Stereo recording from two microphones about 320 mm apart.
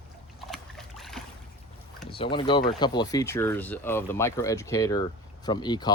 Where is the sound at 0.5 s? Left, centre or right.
Centre.